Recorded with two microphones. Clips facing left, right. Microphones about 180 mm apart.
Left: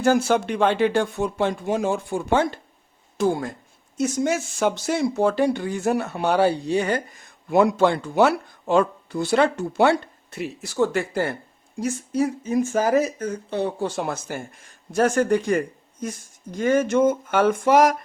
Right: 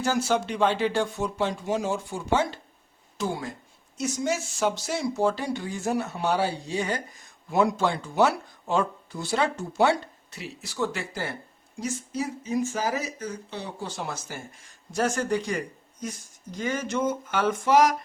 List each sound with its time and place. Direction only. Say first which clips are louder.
0.0 s speech: left 6 dB; 55° left (ahead or behind)